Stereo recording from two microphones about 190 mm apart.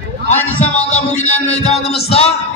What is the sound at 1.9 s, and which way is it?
Speech, 30° left (ahead or behind).